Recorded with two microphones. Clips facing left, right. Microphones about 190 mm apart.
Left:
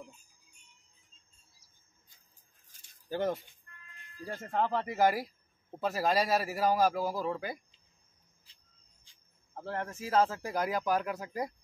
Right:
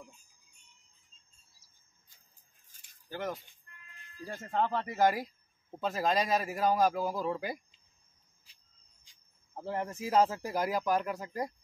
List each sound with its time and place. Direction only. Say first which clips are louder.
3.1 s speech: left 5 dB; 30° left (ahead or behind)
4.5 s a man's voice: even; 5° left (ahead or behind)
9.6 s speech: right 2 dB; 10° right (ahead or behind); by 11.5 s 5° left (ahead or behind)